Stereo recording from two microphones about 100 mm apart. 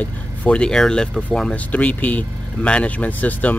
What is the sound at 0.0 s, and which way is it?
Speech, 15° left (ahead or behind).